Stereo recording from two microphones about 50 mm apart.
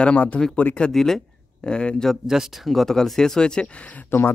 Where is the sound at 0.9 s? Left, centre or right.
Centre.